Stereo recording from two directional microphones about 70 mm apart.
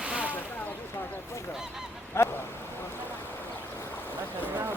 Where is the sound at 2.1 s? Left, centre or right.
Left.